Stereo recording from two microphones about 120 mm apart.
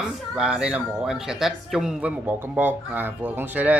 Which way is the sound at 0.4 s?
10° right (ahead or behind).